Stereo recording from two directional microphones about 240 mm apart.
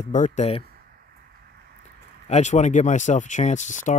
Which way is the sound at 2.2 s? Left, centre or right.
Left.